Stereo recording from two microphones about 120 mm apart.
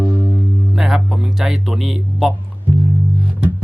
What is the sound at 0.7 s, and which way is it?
Music, 5° right (ahead or behind).